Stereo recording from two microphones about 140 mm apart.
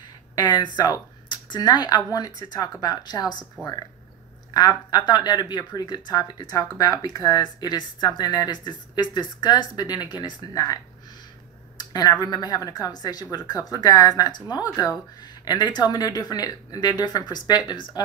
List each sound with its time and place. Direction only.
0.4 s speech: 30° left (ahead or behind)
4.6 s speech: 30° left (ahead or behind)
11.8 s speech: 30° left (ahead or behind)